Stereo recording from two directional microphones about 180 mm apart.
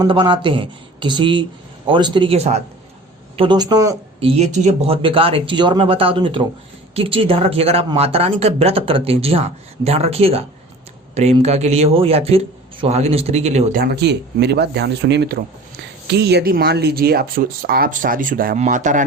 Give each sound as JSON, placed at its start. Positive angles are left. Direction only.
{"t": 0.0, "sound": "speech", "side_deg": -25}
{"t": 4.3, "sound": "speech", "side_deg": -35}
{"t": 13.8, "sound": "speech", "side_deg": -70}